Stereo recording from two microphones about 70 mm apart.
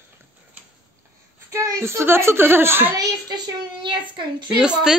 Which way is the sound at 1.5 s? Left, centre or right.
Right.